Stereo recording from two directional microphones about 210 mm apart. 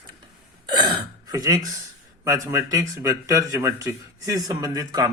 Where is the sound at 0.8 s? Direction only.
20° right (ahead or behind).